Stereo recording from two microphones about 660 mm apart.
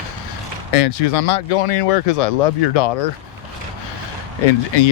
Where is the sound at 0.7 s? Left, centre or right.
Left.